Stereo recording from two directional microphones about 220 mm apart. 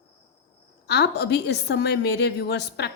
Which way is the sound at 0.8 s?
50° left (ahead or behind).